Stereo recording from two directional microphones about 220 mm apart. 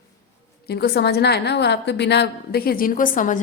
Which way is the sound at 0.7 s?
50° left (ahead or behind).